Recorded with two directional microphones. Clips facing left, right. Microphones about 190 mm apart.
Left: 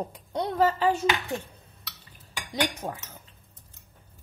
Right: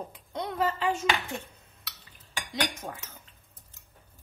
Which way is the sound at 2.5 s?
35° left (ahead or behind).